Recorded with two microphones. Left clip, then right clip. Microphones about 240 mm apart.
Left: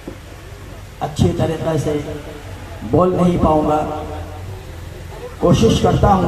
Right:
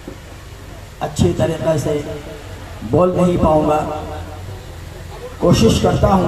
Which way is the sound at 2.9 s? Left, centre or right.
Right.